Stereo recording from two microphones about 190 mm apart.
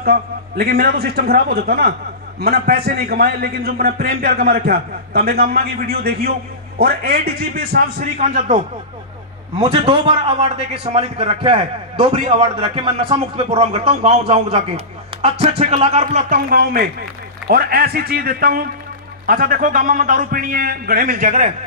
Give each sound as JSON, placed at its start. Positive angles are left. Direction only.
{"t": 0.0, "sound": "a man's voice", "side_deg": -55}
{"t": 9.6, "sound": "a man's voice", "side_deg": -25}